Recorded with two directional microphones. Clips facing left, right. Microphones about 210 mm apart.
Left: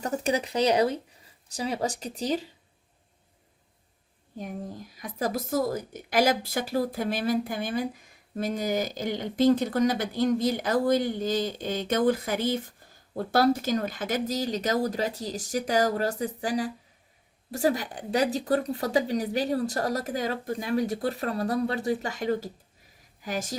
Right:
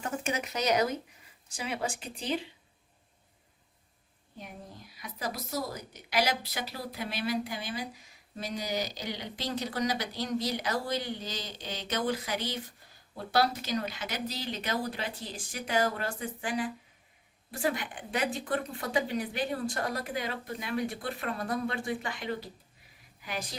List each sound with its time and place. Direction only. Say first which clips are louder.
0.0 s a woman's voice: left 6 dB; 35° left (ahead or behind)
4.4 s a woman's voice: left 10 dB; 45° left (ahead or behind)